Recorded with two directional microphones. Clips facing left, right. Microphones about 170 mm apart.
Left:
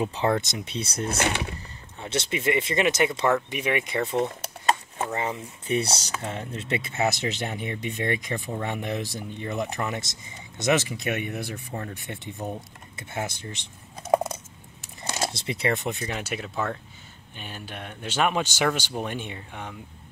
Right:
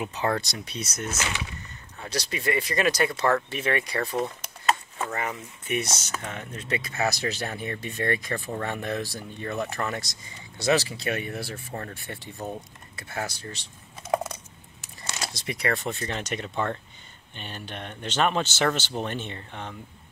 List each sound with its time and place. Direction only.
0.0 s speech: 25° left (ahead or behind)
1.2 s speech: 55° left (ahead or behind)
2.0 s speech: 25° left (ahead or behind)
14.1 s typing: 25° left (ahead or behind)
14.8 s a sound: 50° left (ahead or behind)
15.2 s speech: 25° left (ahead or behind); by 19.8 s 10° left (ahead or behind)